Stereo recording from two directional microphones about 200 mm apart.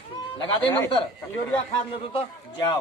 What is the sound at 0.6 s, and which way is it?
Speech, 15° left (ahead or behind).